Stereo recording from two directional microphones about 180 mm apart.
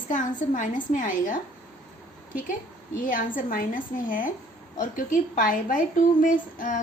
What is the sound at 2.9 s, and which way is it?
A woman's voice, 50° left (ahead or behind).